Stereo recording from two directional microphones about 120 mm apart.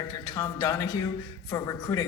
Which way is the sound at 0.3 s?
25° left (ahead or behind).